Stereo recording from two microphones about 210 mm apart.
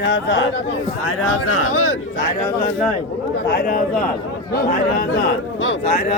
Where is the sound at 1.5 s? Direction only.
85° left.